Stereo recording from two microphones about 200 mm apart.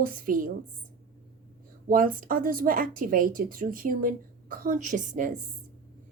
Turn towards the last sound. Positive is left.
turn(degrees=-40)  # may be behind; listen again after turning